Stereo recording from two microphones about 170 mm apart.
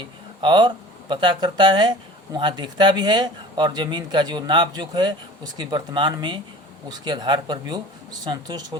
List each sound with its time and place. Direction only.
0.0 s speech: 25° right (ahead or behind)